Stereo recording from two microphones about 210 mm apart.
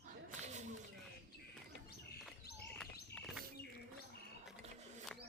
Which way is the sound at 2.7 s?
5° left (ahead or behind).